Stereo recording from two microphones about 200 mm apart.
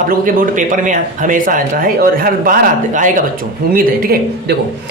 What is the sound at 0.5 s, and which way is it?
A man's voice, 40° right (ahead or behind).